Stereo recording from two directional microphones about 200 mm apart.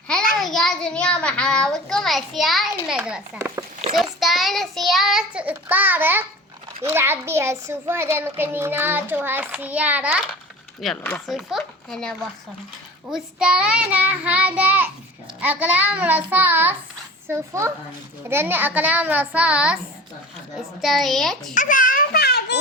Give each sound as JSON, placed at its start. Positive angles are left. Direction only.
{"t": 0.3, "sound": "a child's voice", "side_deg": 0}
{"t": 10.8, "sound": "a child's voice", "side_deg": 5}
{"t": 21.5, "sound": "a child's voice", "side_deg": 40}